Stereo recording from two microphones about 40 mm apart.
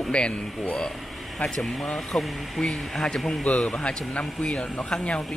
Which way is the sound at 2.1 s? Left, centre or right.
Centre.